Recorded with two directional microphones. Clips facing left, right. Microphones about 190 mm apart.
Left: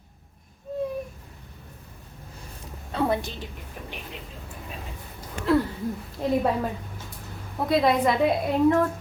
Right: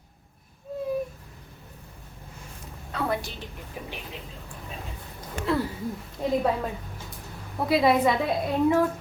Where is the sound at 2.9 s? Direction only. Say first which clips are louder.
Left 4 dB; 25° left (ahead or behind).